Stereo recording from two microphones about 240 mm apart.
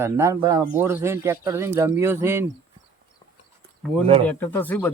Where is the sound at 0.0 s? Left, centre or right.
Centre.